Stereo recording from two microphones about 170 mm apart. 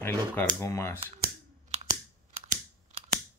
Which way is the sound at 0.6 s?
15° left (ahead or behind).